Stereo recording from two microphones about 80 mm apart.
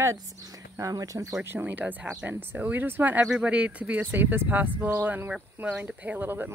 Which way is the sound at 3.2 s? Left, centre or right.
Centre.